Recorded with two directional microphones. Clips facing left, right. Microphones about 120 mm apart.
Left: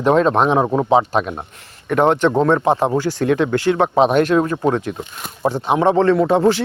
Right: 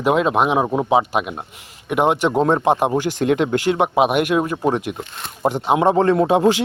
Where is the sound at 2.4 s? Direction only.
25° right (ahead or behind).